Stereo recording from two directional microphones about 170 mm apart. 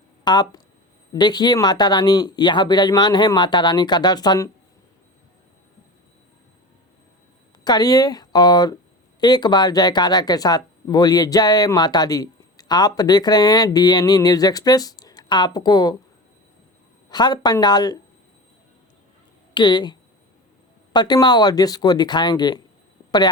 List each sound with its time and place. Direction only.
0.3 s speech: 25° left (ahead or behind)
7.6 s speech: 25° left (ahead or behind)
17.1 s speech: 25° left (ahead or behind)
19.5 s speech: 25° left (ahead or behind)